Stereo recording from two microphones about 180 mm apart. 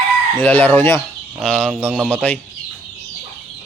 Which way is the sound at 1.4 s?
Centre (ahead or behind).